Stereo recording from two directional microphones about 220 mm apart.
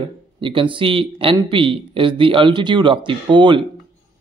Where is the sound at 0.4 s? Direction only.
25° right (ahead or behind).